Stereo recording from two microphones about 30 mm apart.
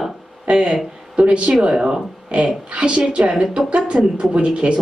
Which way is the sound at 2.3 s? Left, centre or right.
Right.